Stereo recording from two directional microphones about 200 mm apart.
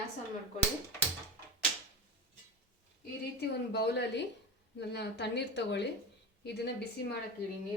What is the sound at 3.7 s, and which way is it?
A woman's voice, 55° left (ahead or behind).